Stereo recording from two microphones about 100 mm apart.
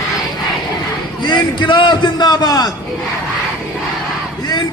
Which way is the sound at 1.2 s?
50° left (ahead or behind).